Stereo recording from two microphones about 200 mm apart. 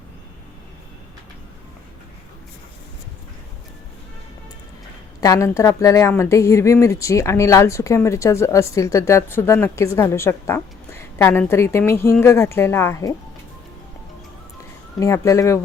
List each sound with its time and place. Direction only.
5.2 s a woman's voice: 15° left (ahead or behind)
14.9 s a woman's voice: 15° left (ahead or behind)